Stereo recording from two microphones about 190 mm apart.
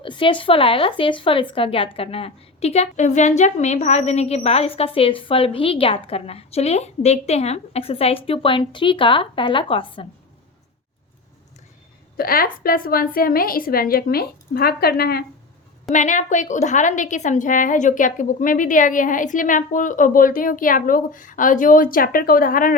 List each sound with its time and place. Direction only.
0.0 s a woman's voice: 25° left (ahead or behind)
12.1 s a woman's voice: 50° left (ahead or behind)
15.9 s a woman's voice: 40° left (ahead or behind)